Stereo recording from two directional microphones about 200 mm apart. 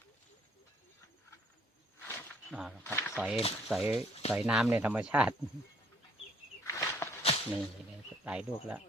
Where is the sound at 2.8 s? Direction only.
10° left (ahead or behind).